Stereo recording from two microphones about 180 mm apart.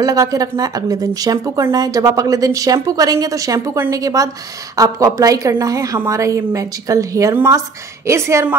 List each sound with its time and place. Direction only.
0.0 s a woman's voice: 20° right (ahead or behind)